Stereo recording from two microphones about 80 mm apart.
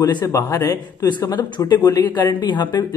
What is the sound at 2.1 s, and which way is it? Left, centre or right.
Speech, left.